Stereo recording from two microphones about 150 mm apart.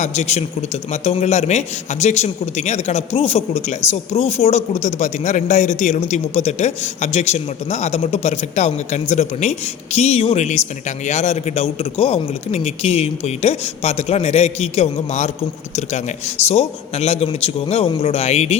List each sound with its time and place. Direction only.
0.0 s a man's voice: 50° left (ahead or behind)